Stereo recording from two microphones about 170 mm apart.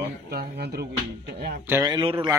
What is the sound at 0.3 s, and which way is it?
Speech, 65° right (ahead or behind).